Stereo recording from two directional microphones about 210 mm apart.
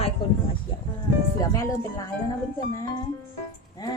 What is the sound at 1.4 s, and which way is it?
Speech, 15° left (ahead or behind).